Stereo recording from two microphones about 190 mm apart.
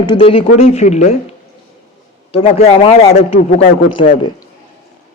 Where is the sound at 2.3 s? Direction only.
35° left (ahead or behind).